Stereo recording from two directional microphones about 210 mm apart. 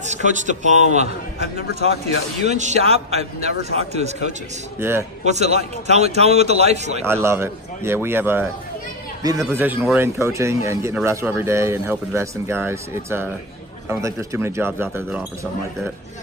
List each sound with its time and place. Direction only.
0.0 s a man's voice: 35° right (ahead or behind)
4.8 s speech: 10° right (ahead or behind)
5.2 s a man's voice: 30° right (ahead or behind)
7.0 s speech: 10° right (ahead or behind)
9.5 s speech: 10° right (ahead or behind)